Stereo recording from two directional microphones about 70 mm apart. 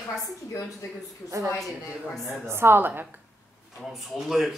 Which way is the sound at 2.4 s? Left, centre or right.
Right.